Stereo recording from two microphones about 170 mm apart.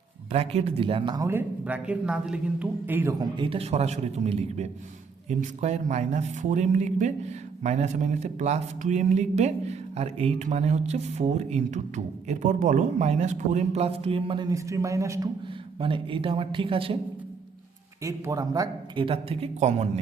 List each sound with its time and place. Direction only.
0.3 s speech: 40° right (ahead or behind); by 15.3 s 20° right (ahead or behind)
15.8 s speech: 30° right (ahead or behind)
18.0 s speech: 20° right (ahead or behind); by 19.9 s 40° right (ahead or behind)